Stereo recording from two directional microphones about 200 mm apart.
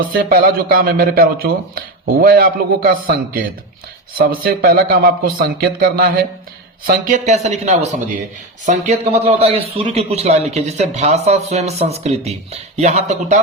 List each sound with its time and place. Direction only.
0.3 s a man's voice: 45° right (ahead or behind)
4.4 s a man's voice: 50° right (ahead or behind)